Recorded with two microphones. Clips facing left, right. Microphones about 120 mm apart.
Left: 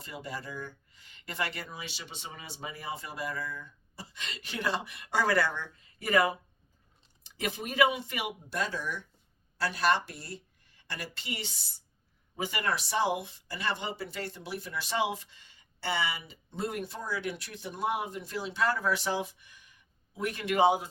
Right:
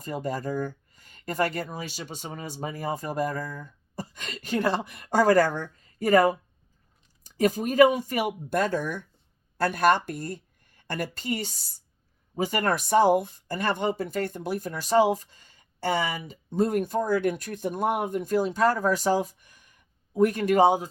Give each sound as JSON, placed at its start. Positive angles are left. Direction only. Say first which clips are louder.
{"t": 0.0, "sound": "speech", "louder": "right 10 dB", "side_deg": -45}